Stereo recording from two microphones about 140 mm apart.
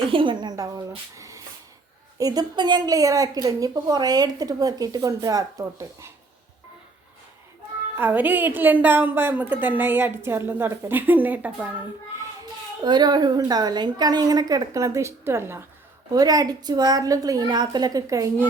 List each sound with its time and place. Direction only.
0.1 s a woman's voice: 35° right (ahead or behind)
7.9 s a woman's voice: 15° right (ahead or behind)
12.8 s a woman's voice: 30° right (ahead or behind)